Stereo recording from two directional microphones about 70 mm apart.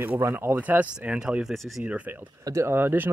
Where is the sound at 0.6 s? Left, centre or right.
Right.